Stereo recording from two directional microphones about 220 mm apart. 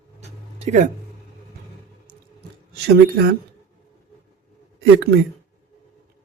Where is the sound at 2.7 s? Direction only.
50° right (ahead or behind).